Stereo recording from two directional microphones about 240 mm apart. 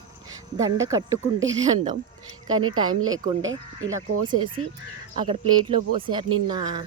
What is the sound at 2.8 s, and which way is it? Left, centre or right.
Speech, centre.